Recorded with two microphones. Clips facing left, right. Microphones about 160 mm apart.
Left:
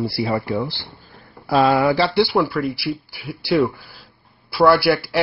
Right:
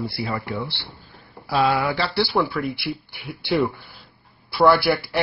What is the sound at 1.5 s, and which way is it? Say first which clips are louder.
Speech: left 5 dB; 45° left (ahead or behind).